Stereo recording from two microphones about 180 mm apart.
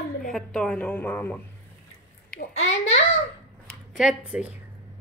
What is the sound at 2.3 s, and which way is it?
Speech, 90° left.